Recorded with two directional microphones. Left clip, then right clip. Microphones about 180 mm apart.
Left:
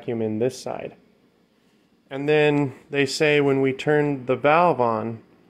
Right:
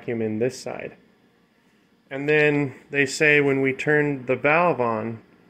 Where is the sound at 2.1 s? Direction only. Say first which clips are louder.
Even; 15° left (ahead or behind).